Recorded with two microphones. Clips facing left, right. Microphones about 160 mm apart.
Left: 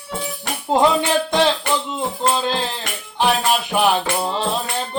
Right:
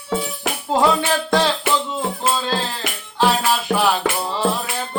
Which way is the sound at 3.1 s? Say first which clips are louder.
Even; 20° left (ahead or behind).